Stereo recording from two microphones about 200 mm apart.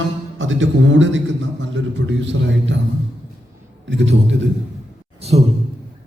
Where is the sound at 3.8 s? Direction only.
65° right (ahead or behind).